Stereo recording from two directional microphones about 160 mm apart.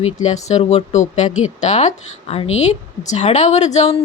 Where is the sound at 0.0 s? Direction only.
45° left (ahead or behind).